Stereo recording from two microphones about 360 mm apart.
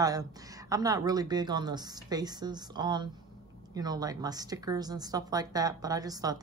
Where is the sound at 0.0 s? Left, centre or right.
Centre.